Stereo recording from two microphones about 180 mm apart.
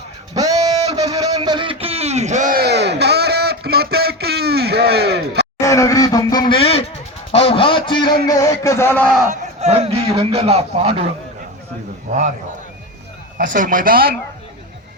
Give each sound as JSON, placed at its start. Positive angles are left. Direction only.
{"t": 0.3, "sound": "guitar", "side_deg": -20}
{"t": 0.9, "sound": "a sound", "side_deg": -20}
{"t": 5.5, "sound": "a man's voice", "side_deg": 15}
{"t": 9.3, "sound": "a man's voice", "side_deg": -35}
{"t": 12.1, "sound": "speech", "side_deg": -40}
{"t": 13.4, "sound": "speech", "side_deg": -45}